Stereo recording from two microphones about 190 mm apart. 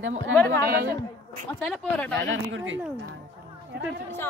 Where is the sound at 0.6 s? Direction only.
55° right (ahead or behind).